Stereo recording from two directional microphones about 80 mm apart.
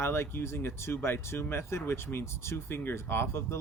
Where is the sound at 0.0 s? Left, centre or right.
Left.